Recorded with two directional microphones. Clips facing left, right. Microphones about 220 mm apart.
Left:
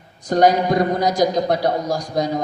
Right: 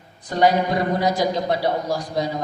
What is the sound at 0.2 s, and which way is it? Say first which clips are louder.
Speech: left 3 dB; 45° left (ahead or behind).